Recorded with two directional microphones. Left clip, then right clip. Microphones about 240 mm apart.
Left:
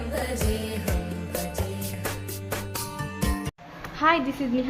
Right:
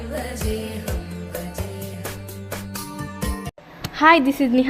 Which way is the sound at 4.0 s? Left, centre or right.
Right.